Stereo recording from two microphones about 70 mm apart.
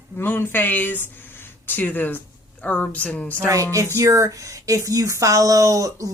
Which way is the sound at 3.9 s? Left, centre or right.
Right.